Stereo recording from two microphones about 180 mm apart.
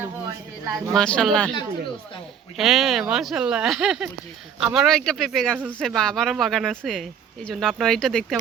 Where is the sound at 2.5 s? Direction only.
Centre (ahead or behind).